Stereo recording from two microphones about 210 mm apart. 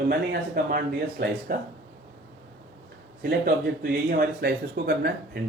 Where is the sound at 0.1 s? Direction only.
45° right (ahead or behind).